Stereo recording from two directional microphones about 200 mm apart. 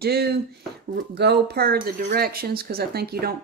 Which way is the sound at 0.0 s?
50° right (ahead or behind).